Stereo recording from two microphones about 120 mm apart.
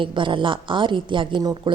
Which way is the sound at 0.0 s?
45° right (ahead or behind).